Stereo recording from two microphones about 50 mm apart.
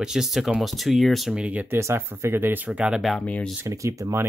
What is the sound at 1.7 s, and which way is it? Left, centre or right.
Speech, right.